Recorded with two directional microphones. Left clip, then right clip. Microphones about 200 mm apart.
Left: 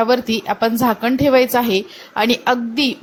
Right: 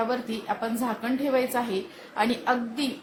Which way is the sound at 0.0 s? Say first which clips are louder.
Left 12 dB; 40° left (ahead or behind).